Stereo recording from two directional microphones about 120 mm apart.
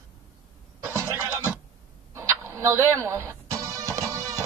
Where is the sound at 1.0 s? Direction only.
25° right (ahead or behind).